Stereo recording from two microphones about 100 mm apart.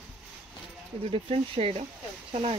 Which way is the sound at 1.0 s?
80° right.